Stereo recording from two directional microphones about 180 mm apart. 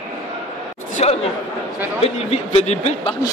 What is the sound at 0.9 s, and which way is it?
Chatter, 35° left (ahead or behind).